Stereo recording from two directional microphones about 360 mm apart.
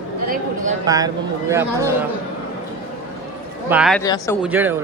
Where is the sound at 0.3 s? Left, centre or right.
Right.